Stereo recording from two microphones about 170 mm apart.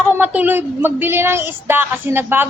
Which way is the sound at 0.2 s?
10° right (ahead or behind).